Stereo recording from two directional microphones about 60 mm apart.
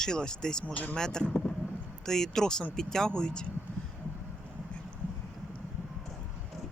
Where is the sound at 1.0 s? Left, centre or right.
Centre.